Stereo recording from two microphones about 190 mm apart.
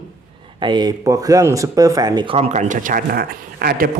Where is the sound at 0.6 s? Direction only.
25° right (ahead or behind); by 3.8 s 50° right (ahead or behind).